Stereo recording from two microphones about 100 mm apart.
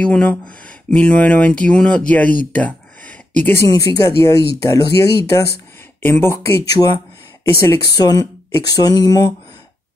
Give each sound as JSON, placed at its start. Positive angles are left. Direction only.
{"t": 0.0, "sound": "speech", "side_deg": 10}
{"t": 3.6, "sound": "speech", "side_deg": 35}
{"t": 6.0, "sound": "speech", "side_deg": 25}
{"t": 7.9, "sound": "speech", "side_deg": 40}